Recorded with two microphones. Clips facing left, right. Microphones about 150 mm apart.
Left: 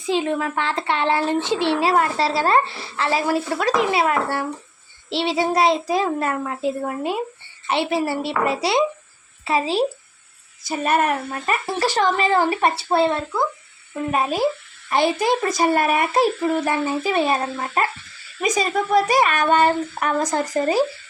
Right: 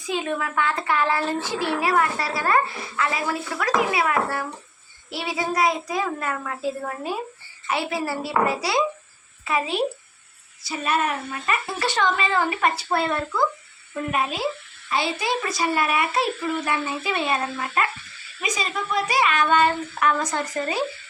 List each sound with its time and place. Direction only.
0.0 s a child's voice: 30° left (ahead or behind)
10.7 s a woman's voice: 50° left (ahead or behind)
11.3 s a child's voice: 40° left (ahead or behind)
14.8 s a child's voice: 50° left (ahead or behind)